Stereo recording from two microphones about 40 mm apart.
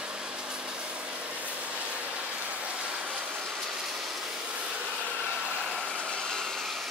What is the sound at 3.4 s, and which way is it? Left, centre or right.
Vehicle, centre.